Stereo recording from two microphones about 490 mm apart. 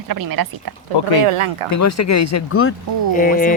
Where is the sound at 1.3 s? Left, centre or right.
Right.